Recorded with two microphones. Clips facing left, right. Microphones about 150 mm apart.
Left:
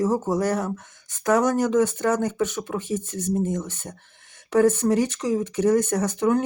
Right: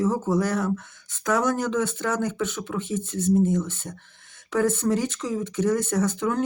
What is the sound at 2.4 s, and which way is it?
Speech, 50° left (ahead or behind).